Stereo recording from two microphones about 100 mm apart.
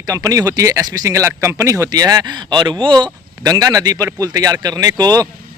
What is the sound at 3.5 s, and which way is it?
Speech, 40° right (ahead or behind).